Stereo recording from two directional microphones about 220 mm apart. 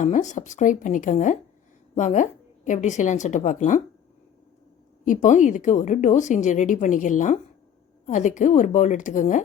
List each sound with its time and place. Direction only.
0.0 s a woman's voice: 35° left (ahead or behind)
5.0 s a woman's voice: 35° left (ahead or behind)